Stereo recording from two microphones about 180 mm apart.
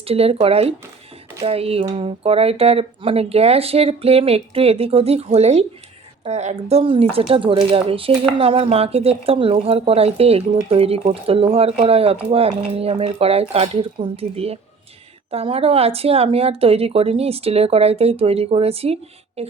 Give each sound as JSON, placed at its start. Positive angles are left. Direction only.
{"t": 0.0, "sound": "speech", "side_deg": -35}